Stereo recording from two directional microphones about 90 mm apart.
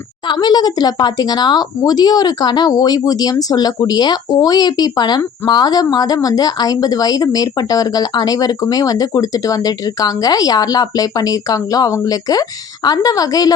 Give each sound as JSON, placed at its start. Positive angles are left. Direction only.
{"t": 0.3, "sound": "a woman's voice", "side_deg": 50}